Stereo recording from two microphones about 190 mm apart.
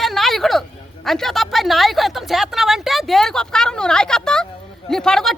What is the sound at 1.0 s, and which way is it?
Speech, centre (ahead or behind).